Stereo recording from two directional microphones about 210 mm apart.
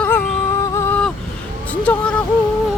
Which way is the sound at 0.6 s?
15° left (ahead or behind).